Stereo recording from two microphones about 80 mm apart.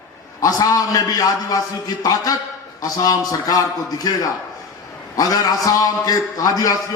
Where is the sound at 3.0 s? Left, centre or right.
Left.